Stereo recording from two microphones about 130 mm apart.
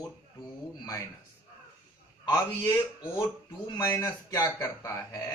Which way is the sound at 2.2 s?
25° left (ahead or behind).